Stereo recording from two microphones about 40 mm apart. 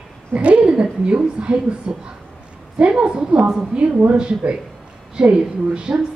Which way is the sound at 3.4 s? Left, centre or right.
Centre.